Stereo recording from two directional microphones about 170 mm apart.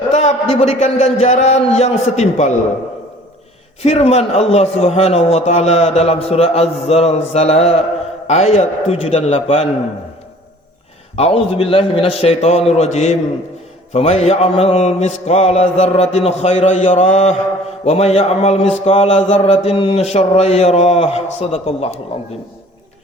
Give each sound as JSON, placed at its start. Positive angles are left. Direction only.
{"t": 0.1, "sound": "mantra", "side_deg": 40}
{"t": 3.8, "sound": "mantra", "side_deg": 40}
{"t": 11.2, "sound": "mantra", "side_deg": 35}